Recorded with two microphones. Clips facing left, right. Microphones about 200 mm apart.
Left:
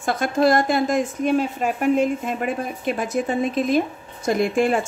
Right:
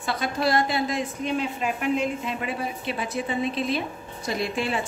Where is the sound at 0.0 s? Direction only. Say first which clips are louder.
Left 7 dB; 50° left (ahead or behind).